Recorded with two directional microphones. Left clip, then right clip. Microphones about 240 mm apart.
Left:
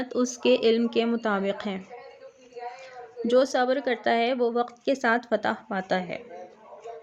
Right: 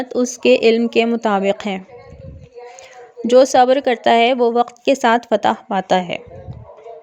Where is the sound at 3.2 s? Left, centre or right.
Right.